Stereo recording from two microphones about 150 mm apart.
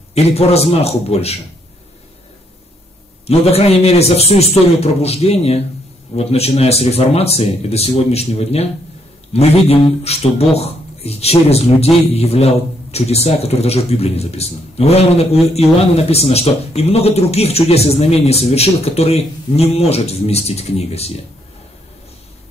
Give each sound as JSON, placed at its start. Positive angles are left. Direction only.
{"t": 0.1, "sound": "a man's voice", "side_deg": 45}
{"t": 3.3, "sound": "a man's voice", "side_deg": 40}